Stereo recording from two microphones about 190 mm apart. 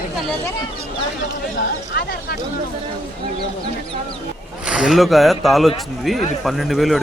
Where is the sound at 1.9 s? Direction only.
60° left (ahead or behind).